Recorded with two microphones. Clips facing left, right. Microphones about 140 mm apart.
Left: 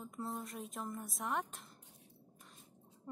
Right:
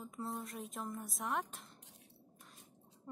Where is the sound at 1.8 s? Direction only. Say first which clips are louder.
Right 1 dB; 80° right.